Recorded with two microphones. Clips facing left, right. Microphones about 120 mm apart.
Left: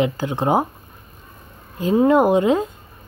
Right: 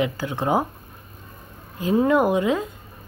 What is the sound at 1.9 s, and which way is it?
Speech, 25° left (ahead or behind).